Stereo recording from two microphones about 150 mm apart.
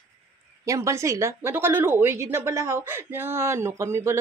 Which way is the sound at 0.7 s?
20° right (ahead or behind).